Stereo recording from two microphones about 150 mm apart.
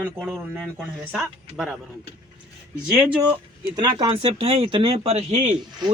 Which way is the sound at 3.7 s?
35° right (ahead or behind).